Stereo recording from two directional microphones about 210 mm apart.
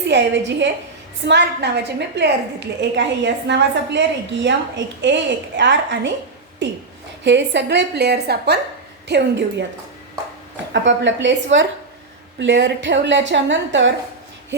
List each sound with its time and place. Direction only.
0.1 s a woman's voice: 55° right (ahead or behind)
10.7 s a woman's voice: 60° right (ahead or behind)